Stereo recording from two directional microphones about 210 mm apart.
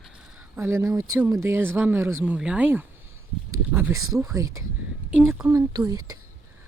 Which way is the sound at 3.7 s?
10° right (ahead or behind).